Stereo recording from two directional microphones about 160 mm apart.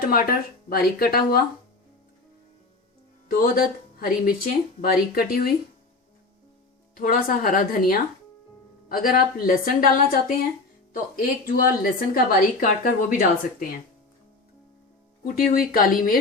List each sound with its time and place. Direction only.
0.0 s speech: 65° left (ahead or behind)
3.2 s speech: 65° left (ahead or behind)
6.9 s a woman's voice: 60° left (ahead or behind)
15.2 s a woman's voice: 65° left (ahead or behind)